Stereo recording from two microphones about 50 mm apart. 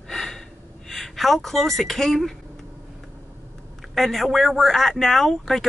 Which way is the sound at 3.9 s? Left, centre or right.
Centre.